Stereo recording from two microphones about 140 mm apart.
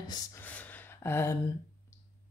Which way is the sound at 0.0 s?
30° left (ahead or behind).